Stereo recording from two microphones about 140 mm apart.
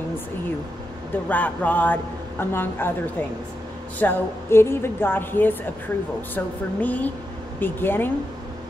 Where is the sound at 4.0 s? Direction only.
15° left (ahead or behind).